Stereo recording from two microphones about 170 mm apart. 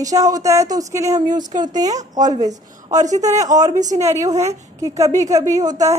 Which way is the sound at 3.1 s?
45° right (ahead or behind).